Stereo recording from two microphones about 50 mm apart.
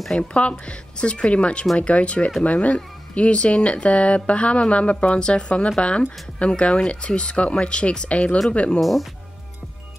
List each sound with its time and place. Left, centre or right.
0.0 s speech: centre
0.3 s speech: left